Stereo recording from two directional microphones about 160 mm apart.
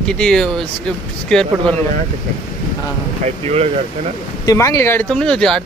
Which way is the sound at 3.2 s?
40° right (ahead or behind).